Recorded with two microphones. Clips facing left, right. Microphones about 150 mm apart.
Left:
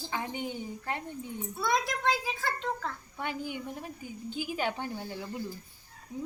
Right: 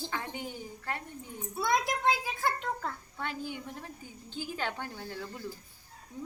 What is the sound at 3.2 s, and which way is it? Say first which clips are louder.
Speech: left 2 dB; 15° left (ahead or behind).